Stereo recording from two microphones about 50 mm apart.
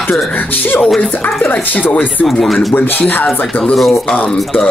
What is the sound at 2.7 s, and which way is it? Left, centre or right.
Speech, left.